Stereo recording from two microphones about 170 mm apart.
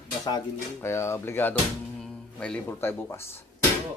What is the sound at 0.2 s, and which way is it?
Speech, 20° left (ahead or behind).